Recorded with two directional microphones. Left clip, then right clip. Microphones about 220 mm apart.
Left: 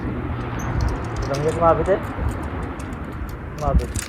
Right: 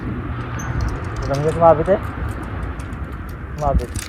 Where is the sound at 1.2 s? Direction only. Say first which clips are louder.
Right 2 dB; 30° right (ahead or behind).